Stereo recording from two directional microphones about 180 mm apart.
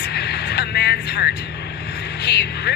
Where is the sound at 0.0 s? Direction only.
65° left (ahead or behind).